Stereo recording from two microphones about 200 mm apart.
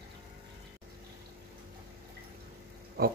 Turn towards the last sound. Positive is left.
turn(degrees=-50)  # may be behind; listen again after turning